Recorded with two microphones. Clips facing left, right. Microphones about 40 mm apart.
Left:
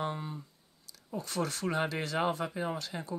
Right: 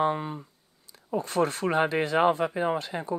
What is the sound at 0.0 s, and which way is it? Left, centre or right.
Speech, right.